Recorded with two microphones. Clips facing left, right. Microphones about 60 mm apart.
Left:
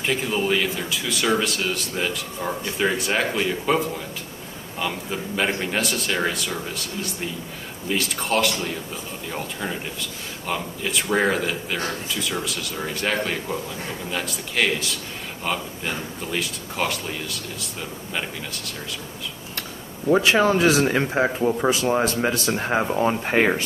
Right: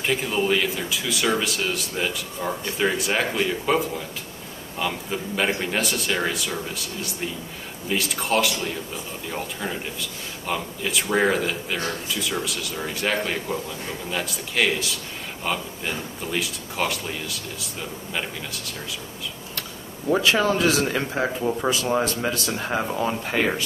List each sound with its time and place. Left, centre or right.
0.0 s speech: centre
20.2 s speech: left